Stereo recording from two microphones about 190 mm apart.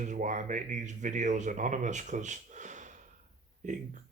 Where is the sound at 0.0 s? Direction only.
40° right (ahead or behind).